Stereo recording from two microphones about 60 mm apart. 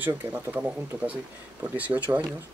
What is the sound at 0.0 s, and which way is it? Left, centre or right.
Speech, right.